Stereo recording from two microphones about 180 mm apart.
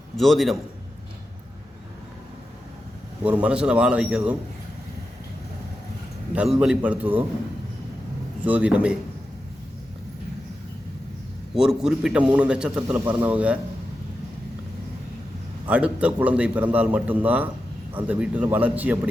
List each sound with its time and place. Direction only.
0.2 s a man's voice: centre (ahead or behind)
3.2 s a man's voice: 10° right (ahead or behind)
6.3 s a man's voice: 5° right (ahead or behind)
8.4 s a man's voice: 10° right (ahead or behind)
11.5 s a man's voice: 5° right (ahead or behind)
15.6 s a man's voice: 5° right (ahead or behind)